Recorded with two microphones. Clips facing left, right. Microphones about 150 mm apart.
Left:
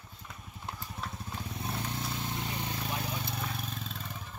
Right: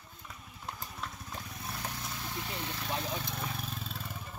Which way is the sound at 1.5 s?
25° left (ahead or behind).